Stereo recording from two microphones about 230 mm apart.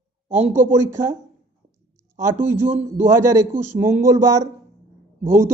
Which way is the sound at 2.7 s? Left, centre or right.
Right.